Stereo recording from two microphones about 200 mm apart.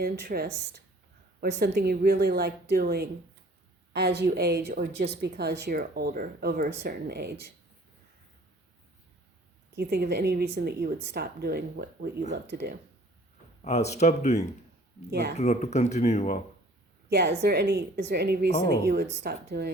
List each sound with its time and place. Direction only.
0.0 s a woman's voice: 50° right (ahead or behind)
9.7 s a woman's voice: 50° right (ahead or behind)
13.6 s speech: 35° left (ahead or behind)
15.1 s a woman's voice: 55° right (ahead or behind)
15.4 s speech: 35° left (ahead or behind)
17.1 s a woman's voice: 55° right (ahead or behind)